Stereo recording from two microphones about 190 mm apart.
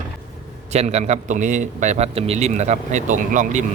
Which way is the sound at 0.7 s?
35° right (ahead or behind).